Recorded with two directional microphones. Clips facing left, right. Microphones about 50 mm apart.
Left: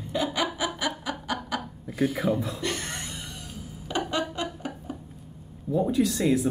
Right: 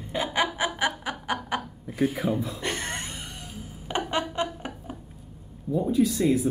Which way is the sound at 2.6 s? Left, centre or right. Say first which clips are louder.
Right 1 dB; right.